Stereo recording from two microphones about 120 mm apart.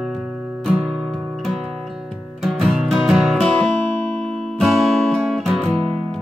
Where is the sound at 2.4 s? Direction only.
5° right (ahead or behind).